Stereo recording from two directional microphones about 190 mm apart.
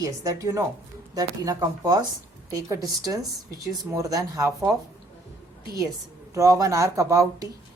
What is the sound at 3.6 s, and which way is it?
Speech, 15° right (ahead or behind).